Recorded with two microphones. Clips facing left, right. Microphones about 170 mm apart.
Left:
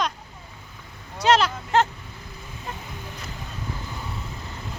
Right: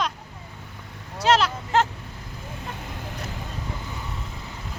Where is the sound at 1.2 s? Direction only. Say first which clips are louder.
Left 1 dB; centre (ahead or behind).